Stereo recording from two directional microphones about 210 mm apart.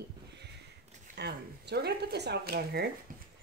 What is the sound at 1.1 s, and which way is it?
Speech, 50° right (ahead or behind).